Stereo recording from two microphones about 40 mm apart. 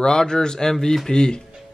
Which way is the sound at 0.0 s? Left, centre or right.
Centre.